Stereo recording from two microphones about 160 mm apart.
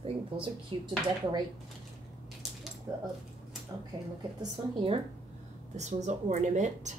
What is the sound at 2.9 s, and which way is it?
Speech, 20° right (ahead or behind).